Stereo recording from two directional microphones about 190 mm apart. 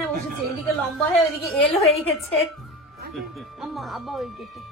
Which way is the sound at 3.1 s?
Centre (ahead or behind).